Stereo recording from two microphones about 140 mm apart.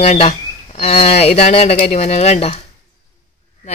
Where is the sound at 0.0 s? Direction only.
55° left (ahead or behind).